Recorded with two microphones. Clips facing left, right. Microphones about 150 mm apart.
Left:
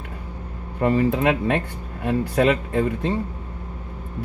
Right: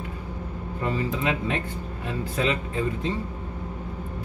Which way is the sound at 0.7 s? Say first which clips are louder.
Left 8 dB; 65° left (ahead or behind).